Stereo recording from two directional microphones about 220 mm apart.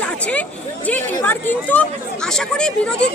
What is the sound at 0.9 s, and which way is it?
Speech, 5° left (ahead or behind).